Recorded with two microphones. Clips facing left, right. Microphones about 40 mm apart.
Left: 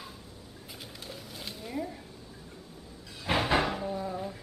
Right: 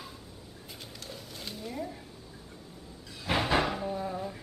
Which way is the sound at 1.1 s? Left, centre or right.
Centre.